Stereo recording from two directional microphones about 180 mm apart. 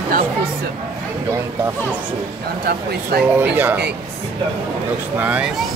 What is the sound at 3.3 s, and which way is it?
Speech, 10° right (ahead or behind).